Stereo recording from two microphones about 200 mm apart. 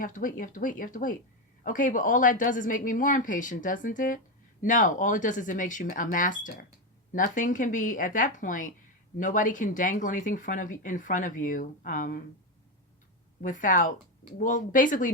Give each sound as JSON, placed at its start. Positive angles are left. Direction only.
{"t": 0.0, "sound": "speech", "side_deg": 40}
{"t": 13.4, "sound": "speech", "side_deg": 40}